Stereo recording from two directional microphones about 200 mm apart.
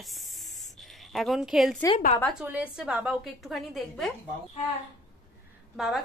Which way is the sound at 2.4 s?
5° right (ahead or behind).